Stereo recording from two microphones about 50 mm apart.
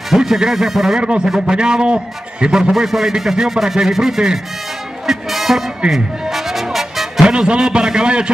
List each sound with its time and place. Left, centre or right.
0.1 s a man's voice: centre
1.0 s a man's voice: centre
2.7 s a man's voice: centre
5.0 s music: centre
7.2 s a man's voice: centre